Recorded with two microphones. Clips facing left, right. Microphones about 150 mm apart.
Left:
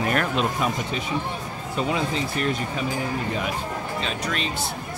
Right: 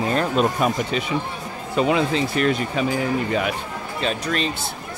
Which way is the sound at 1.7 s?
80° right.